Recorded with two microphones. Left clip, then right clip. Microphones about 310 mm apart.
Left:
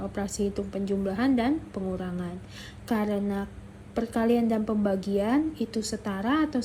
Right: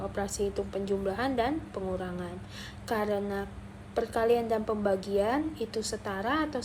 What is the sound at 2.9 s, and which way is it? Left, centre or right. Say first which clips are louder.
A woman's voice: left 1 dB; centre.